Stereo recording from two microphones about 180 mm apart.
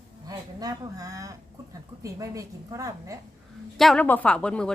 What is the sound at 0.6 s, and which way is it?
A woman's voice, 20° right (ahead or behind).